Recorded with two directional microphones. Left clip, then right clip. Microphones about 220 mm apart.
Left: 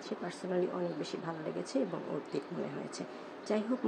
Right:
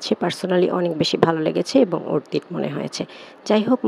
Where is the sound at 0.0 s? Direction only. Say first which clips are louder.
Right 17 dB; 45° right (ahead or behind).